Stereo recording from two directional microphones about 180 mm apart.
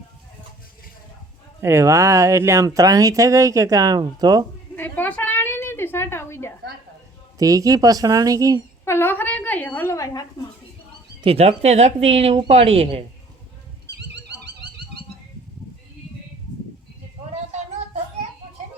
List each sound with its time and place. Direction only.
1.6 s speech: 15° right (ahead or behind)
4.7 s a sound: 10° left (ahead or behind)
7.3 s speech: 20° right (ahead or behind)
8.8 s speech: 15° left (ahead or behind)
11.2 s speech: 35° right (ahead or behind)
13.9 s a sound: 65° right (ahead or behind)